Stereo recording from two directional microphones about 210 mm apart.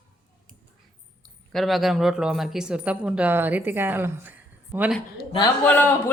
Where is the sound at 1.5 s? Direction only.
Centre (ahead or behind).